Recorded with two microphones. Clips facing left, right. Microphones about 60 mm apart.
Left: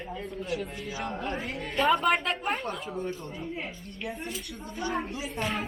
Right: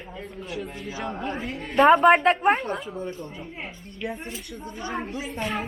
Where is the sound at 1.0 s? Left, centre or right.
Right.